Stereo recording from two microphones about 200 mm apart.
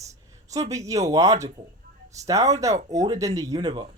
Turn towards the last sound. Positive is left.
turn(degrees=-20)  # may be behind; listen again after turning